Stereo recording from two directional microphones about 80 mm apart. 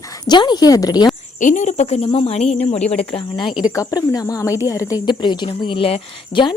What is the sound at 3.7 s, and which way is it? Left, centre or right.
A woman's voice, left.